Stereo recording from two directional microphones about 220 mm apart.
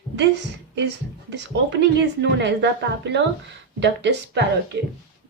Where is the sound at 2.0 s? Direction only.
50° right (ahead or behind).